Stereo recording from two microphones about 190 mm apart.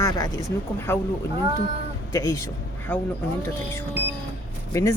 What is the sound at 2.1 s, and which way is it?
Speech, 15° left (ahead or behind).